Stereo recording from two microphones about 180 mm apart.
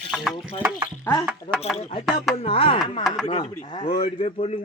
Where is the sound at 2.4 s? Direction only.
30° left (ahead or behind).